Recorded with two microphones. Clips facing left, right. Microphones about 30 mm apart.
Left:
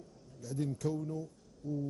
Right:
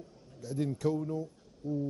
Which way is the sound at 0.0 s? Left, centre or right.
Right.